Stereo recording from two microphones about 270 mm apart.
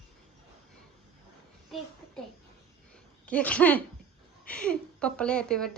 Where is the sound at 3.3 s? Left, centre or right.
Centre.